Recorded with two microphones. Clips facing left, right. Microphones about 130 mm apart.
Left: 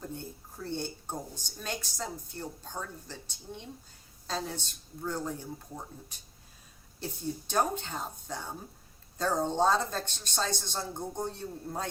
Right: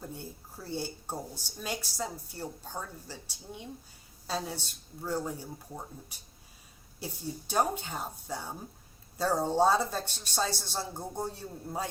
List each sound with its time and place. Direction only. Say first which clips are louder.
0.1 s speech: left 2 dB; 10° right (ahead or behind)